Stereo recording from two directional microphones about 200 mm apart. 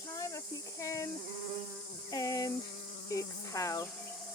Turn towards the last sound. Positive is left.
turn(degrees=15)  # may be behind; listen again after turning